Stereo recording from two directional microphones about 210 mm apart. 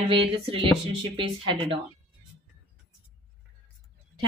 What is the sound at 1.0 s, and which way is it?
Speech, 25° right (ahead or behind).